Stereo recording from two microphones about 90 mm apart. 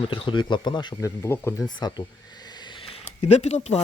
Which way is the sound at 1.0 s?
30° left (ahead or behind).